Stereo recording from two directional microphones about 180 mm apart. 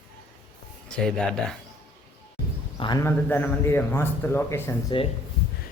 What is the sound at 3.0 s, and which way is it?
A man's voice, 10° left (ahead or behind).